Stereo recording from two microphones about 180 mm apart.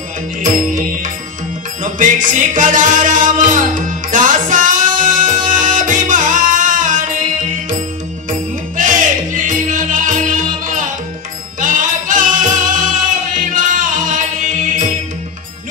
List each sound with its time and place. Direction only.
0.4 s music: 45° right (ahead or behind)